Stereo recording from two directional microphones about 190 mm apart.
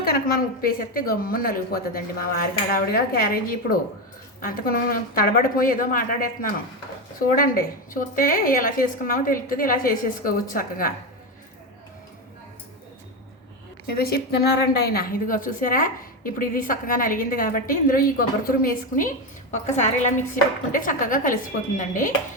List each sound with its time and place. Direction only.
0.0 s a woman's voice: 50° left (ahead or behind)
13.8 s a woman's voice: 55° left (ahead or behind)